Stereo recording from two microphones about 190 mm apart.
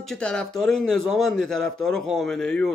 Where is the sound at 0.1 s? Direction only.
5° left (ahead or behind).